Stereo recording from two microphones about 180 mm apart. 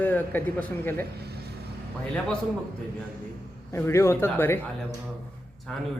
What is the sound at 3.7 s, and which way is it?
Speech, 15° left (ahead or behind).